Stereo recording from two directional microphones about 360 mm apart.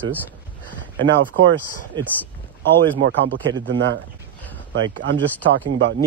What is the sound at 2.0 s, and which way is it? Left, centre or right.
Speech, centre.